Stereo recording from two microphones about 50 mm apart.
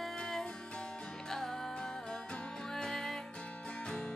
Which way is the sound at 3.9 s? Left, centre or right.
Centre.